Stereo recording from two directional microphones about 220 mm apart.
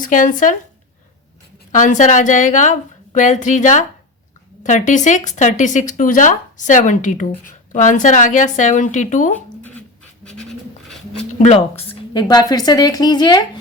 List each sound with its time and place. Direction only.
0.0 s speech: 35° left (ahead or behind)
1.7 s speech: 35° left (ahead or behind)
11.3 s speech: 30° left (ahead or behind)
11.7 s speech: 15° left (ahead or behind)